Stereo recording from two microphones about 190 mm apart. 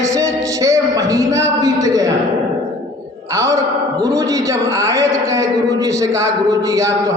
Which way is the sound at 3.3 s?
15° right (ahead or behind).